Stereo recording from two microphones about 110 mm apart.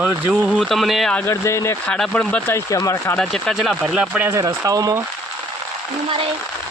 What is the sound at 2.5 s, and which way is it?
Speech, 30° left (ahead or behind).